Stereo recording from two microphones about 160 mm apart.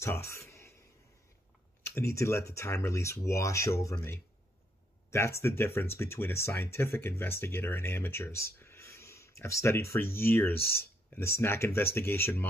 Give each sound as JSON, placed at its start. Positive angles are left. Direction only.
{"t": 0.0, "sound": "a sound", "side_deg": 15}
{"t": 2.0, "sound": "speech", "side_deg": 15}
{"t": 10.5, "sound": "speech", "side_deg": 70}
{"t": 10.8, "sound": "speech", "side_deg": 15}